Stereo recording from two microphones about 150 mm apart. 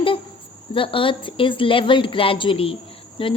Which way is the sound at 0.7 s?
35° left (ahead or behind).